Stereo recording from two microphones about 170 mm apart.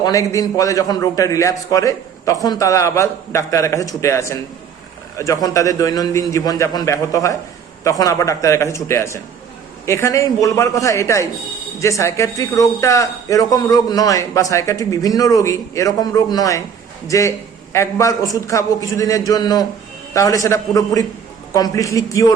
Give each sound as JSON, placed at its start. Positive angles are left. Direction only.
{"t": 0.0, "sound": "a man's voice", "side_deg": 20}